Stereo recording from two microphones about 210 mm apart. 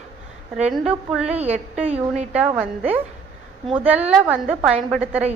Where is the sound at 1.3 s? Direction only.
30° right (ahead or behind).